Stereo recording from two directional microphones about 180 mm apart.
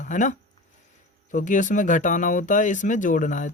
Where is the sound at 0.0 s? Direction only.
45° left (ahead or behind).